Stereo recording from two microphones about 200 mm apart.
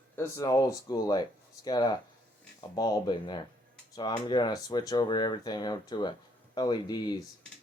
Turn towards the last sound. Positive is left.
turn(degrees=20)  # may be behind; listen again after turning